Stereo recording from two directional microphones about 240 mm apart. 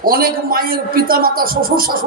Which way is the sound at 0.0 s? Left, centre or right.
Right.